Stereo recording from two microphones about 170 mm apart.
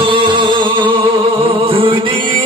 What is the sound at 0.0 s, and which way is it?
Music, 30° right (ahead or behind).